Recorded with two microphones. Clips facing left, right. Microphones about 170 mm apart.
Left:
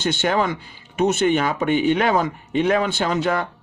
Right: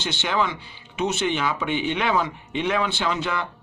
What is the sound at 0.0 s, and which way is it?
Speech, 50° left (ahead or behind).